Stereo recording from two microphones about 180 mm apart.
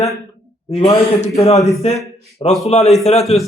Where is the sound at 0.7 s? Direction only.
35° left (ahead or behind).